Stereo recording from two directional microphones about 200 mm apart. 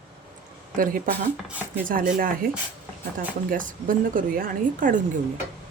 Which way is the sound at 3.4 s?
40° right (ahead or behind).